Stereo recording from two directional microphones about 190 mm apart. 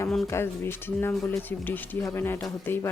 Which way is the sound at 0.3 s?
15° left (ahead or behind).